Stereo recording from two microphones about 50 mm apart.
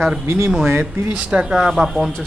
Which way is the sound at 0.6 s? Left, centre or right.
Right.